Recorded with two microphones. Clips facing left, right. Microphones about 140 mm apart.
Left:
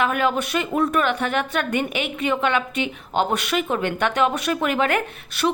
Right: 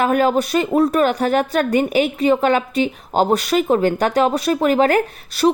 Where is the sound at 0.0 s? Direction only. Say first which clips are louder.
Right 5 dB; 40° right (ahead or behind).